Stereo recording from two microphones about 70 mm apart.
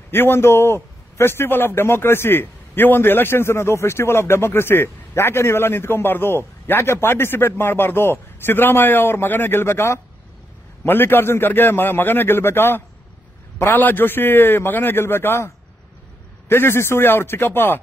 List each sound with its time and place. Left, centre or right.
0.1 s a man's voice: left